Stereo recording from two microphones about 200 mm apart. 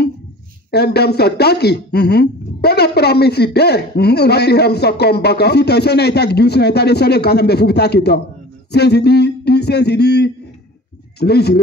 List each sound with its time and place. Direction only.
0.7 s speech: 55° left (ahead or behind)